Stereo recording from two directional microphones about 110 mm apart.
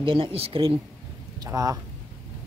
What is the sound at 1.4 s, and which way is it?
Speech, 30° right (ahead or behind).